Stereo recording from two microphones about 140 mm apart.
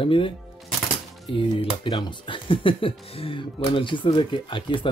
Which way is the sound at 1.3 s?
35° left (ahead or behind).